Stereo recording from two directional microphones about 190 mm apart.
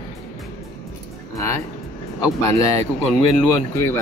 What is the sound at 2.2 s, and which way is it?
Speech, 15° left (ahead or behind).